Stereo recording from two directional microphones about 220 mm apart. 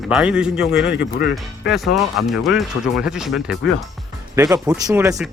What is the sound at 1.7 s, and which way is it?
Speech, centre (ahead or behind).